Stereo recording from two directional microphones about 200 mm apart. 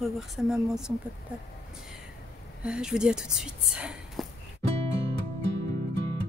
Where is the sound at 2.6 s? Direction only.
5° right (ahead or behind).